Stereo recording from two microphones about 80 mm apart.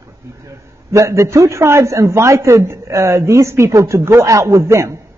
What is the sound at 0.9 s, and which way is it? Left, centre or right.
Speech, right.